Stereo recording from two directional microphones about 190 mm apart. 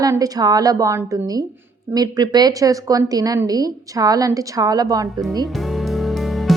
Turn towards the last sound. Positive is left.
turn(degrees=0)  # may be behind; listen again after turning